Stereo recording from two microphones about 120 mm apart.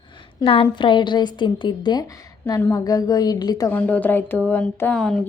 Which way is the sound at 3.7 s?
15° left (ahead or behind).